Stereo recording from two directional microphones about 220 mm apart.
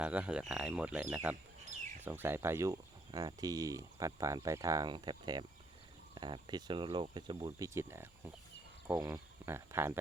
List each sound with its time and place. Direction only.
0.0 s speech: 5° right (ahead or behind)